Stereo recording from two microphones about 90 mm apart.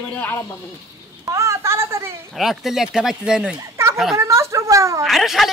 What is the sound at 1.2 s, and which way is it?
Speech, 35° right (ahead or behind).